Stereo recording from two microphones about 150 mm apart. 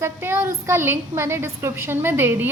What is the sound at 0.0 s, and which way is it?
Speech, 15° right (ahead or behind).